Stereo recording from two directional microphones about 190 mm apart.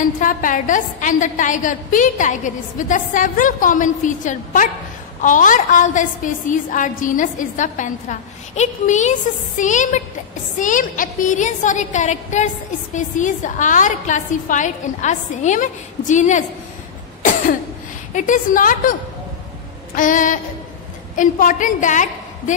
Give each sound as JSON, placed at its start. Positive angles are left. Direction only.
{"t": 0.2, "sound": "a woman's voice", "side_deg": 45}
{"t": 18.1, "sound": "a woman's voice", "side_deg": 40}
{"t": 20.0, "sound": "a woman's voice", "side_deg": 45}